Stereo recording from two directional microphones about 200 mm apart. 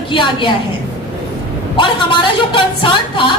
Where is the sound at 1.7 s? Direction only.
25° left (ahead or behind).